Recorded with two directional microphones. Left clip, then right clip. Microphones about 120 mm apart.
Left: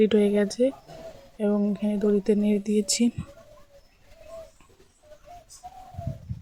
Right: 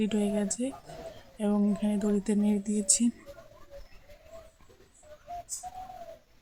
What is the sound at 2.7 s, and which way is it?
Speech, 60° left (ahead or behind).